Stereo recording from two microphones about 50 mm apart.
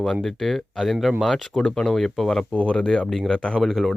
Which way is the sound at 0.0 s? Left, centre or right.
Centre.